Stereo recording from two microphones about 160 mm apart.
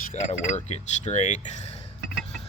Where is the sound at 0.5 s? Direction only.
45° left (ahead or behind).